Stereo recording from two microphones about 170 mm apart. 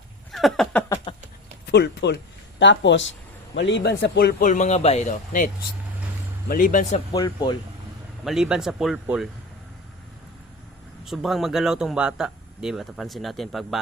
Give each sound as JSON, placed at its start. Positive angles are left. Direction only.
{"t": 0.3, "sound": "a sound", "side_deg": 0}
{"t": 1.6, "sound": "speech", "side_deg": 80}
{"t": 4.4, "sound": "speech", "side_deg": 45}
{"t": 6.5, "sound": "speech", "side_deg": 50}
{"t": 7.1, "sound": "speech", "side_deg": 25}
{"t": 8.2, "sound": "speech", "side_deg": 0}
{"t": 11.0, "sound": "speech", "side_deg": 0}